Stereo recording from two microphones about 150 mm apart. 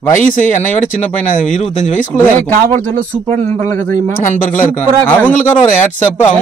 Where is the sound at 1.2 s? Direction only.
5° left (ahead or behind).